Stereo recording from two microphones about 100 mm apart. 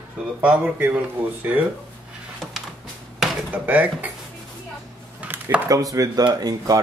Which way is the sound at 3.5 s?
15° right (ahead or behind).